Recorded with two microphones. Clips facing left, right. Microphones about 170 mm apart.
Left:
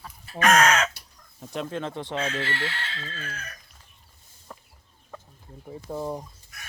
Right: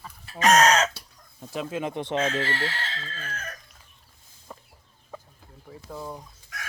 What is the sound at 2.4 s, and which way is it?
Chicken, 40° right (ahead or behind).